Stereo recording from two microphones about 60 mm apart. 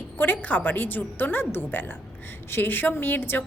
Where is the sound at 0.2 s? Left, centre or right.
Left.